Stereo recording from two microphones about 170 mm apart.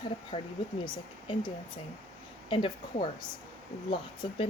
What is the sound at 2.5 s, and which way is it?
Speech, 30° left (ahead or behind).